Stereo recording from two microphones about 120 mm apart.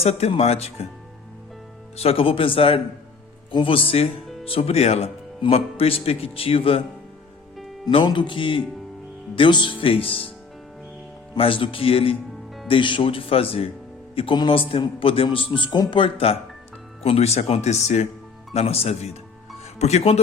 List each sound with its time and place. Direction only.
0.0 s speech: 60° left (ahead or behind)
2.0 s speech: 55° left (ahead or behind)
7.9 s speech: 40° left (ahead or behind)
11.3 s speech: 45° left (ahead or behind)